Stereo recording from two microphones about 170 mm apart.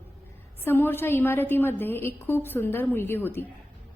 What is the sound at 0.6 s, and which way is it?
A woman's voice, 10° left (ahead or behind).